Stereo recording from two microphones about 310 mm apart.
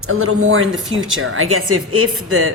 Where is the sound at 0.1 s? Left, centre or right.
Right.